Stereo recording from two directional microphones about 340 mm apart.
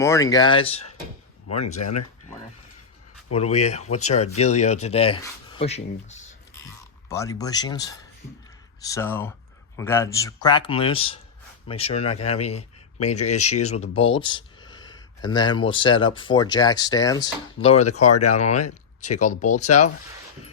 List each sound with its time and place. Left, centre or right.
0.0 s speech: centre
1.7 s speech: left
3.3 s speech: centre